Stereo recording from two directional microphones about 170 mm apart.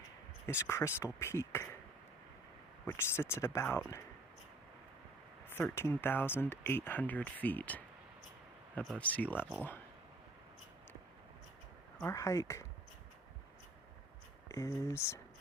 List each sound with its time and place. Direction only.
0.7 s speech: 15° left (ahead or behind)
2.8 s speech: 15° left (ahead or behind)
5.5 s speech: 15° left (ahead or behind)
12.0 s speech: 20° left (ahead or behind)
14.4 s speech: 20° left (ahead or behind)